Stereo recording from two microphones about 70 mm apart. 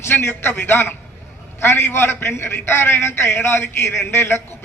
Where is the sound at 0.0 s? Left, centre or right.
Left.